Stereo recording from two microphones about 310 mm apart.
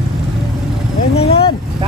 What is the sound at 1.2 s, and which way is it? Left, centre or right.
Vehicle, centre.